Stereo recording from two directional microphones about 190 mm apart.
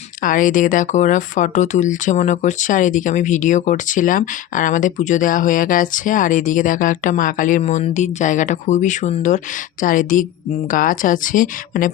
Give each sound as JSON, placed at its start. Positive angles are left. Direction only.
{"t": 0.2, "sound": "a woman's voice", "side_deg": 45}